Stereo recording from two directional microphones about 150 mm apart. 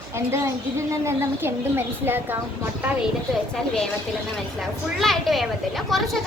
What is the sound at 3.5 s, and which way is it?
Speech, 5° left (ahead or behind).